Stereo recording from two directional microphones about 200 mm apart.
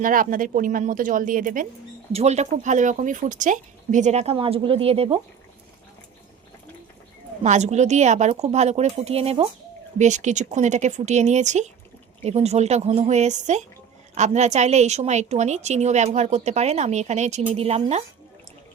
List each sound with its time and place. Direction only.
0.0 s a woman's voice: 40° right (ahead or behind)
7.4 s a woman's voice: 35° right (ahead or behind)